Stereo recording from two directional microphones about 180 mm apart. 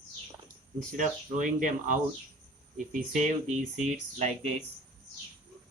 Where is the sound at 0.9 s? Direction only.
45° right (ahead or behind).